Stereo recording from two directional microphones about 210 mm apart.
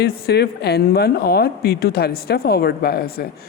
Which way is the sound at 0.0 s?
50° left (ahead or behind).